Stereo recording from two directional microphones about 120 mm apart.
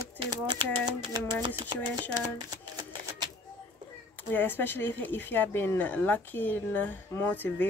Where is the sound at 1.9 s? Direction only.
35° right (ahead or behind).